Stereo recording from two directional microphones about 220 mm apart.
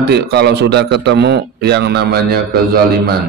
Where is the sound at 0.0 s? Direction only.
50° right (ahead or behind).